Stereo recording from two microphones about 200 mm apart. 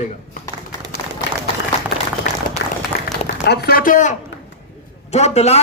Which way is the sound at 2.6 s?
65° left (ahead or behind).